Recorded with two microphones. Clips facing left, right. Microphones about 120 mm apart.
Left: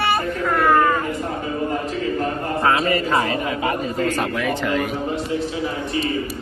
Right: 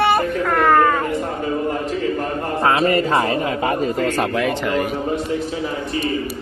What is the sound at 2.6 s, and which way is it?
Speech, 30° right (ahead or behind).